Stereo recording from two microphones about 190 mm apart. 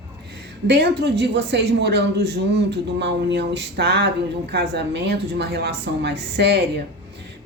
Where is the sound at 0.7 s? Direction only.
60° right (ahead or behind).